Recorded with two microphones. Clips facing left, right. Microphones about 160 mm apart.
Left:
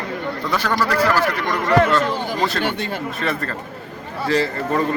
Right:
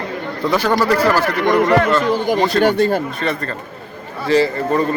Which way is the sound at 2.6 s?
40° right (ahead or behind).